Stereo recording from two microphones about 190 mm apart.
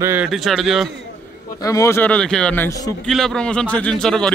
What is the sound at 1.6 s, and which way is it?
A man's voice, 15° left (ahead or behind).